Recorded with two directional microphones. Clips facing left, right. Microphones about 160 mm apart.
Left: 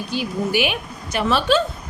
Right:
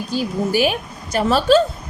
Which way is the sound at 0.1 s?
40° right (ahead or behind).